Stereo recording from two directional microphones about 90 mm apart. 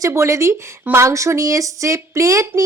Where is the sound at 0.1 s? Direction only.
30° right (ahead or behind).